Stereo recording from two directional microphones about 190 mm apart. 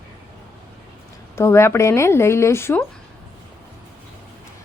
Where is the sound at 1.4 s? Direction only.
15° left (ahead or behind).